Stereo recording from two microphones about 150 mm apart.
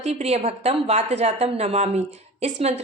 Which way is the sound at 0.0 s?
45° right (ahead or behind).